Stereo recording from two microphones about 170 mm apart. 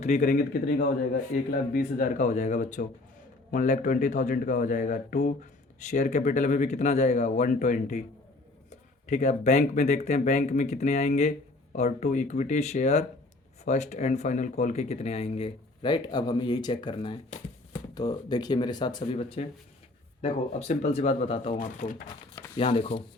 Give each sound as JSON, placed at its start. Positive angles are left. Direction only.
{"t": 0.0, "sound": "speech", "side_deg": 45}
{"t": 21.6, "sound": "speech", "side_deg": 50}
{"t": 22.5, "sound": "speech", "side_deg": 35}